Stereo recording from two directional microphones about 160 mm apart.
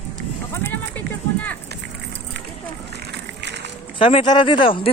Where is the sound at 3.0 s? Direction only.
90° right.